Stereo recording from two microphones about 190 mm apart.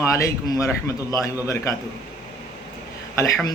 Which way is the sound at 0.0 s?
15° left (ahead or behind).